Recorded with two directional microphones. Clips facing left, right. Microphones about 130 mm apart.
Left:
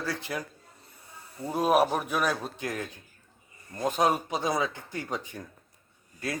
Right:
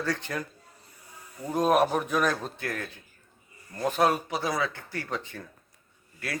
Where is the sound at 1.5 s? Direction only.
10° left (ahead or behind).